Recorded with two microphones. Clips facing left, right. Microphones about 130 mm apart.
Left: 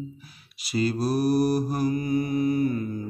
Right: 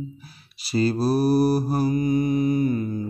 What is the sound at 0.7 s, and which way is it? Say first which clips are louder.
Mantra: right 3 dB; 30° right (ahead or behind).